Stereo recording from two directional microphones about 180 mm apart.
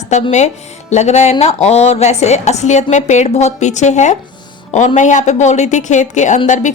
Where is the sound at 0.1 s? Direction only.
40° left (ahead or behind).